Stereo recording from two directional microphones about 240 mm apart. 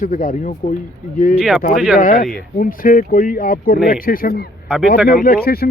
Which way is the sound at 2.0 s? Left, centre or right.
Left.